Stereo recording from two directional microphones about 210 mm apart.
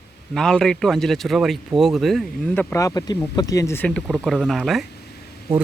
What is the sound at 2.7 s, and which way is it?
Speech, 15° left (ahead or behind).